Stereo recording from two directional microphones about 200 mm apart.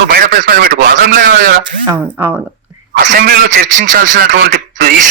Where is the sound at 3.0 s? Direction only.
45° right (ahead or behind).